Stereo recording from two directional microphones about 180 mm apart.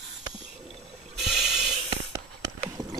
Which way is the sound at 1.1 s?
Centre (ahead or behind).